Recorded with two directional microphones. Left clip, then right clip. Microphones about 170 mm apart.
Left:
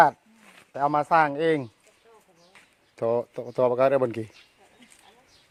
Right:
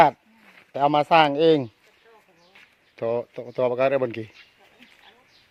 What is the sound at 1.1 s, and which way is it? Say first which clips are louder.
Speech: right 5 dB; 50° right (ahead or behind).